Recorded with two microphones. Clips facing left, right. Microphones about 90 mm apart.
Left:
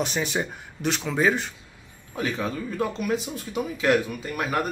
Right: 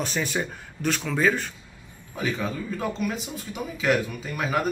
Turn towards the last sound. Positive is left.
turn(degrees=0)  # may be behind; listen again after turning